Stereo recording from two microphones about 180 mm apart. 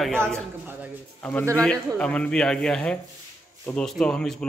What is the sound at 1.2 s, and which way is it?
A man's voice, 10° left (ahead or behind).